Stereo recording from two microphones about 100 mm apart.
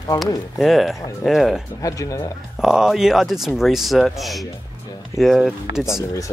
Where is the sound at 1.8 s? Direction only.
35° left (ahead or behind).